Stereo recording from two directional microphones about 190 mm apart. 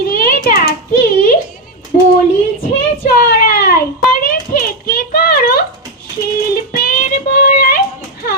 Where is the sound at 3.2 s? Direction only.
50° left (ahead or behind).